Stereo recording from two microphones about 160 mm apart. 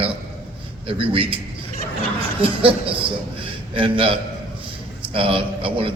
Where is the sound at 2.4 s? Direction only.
35° right (ahead or behind).